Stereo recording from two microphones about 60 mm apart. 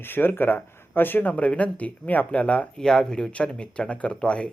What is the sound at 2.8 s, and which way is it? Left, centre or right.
Speech, centre.